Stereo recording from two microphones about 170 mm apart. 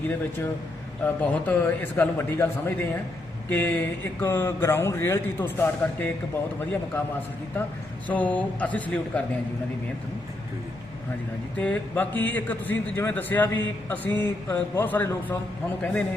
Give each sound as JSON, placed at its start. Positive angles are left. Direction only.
{"t": 1.0, "sound": "a man's voice", "side_deg": 10}
{"t": 8.0, "sound": "a man's voice", "side_deg": 10}
{"t": 11.5, "sound": "a man's voice", "side_deg": 10}